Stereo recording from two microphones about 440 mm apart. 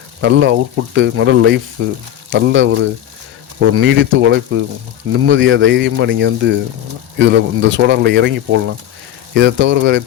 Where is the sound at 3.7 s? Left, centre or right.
Right.